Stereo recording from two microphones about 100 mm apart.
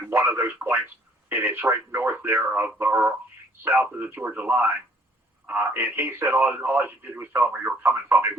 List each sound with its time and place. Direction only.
0.0 s speech: 25° right (ahead or behind)